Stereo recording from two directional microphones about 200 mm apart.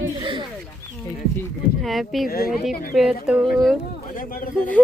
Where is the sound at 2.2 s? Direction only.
50° left (ahead or behind).